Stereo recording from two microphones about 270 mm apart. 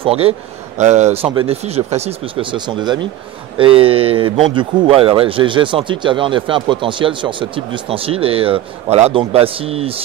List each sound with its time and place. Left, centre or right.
0.0 s a man's voice: right